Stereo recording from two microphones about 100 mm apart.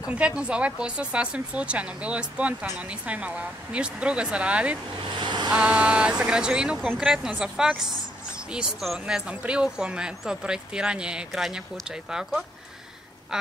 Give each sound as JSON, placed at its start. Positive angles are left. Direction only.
{"t": 0.0, "sound": "a woman's voice", "side_deg": -10}
{"t": 5.2, "sound": "waves", "side_deg": -50}
{"t": 5.5, "sound": "speech", "side_deg": -10}
{"t": 13.3, "sound": "duck", "side_deg": -5}